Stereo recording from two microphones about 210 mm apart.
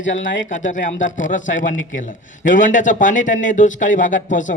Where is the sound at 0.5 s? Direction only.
40° left (ahead or behind).